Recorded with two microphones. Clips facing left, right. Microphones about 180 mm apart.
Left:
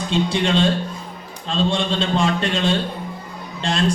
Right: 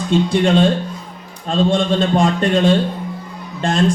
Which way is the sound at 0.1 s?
50° right (ahead or behind).